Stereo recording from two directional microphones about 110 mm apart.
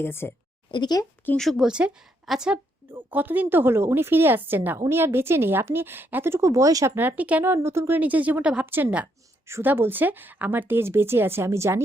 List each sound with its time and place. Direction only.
0.0 s a woman's voice: 20° left (ahead or behind)
0.7 s speech: 40° left (ahead or behind)
1.4 s speech: centre (ahead or behind)
2.9 s speech: 15° right (ahead or behind)
7.2 s speech: 15° right (ahead or behind)